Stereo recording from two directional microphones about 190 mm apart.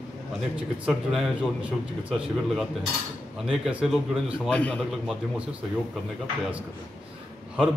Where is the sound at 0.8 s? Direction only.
5° right (ahead or behind).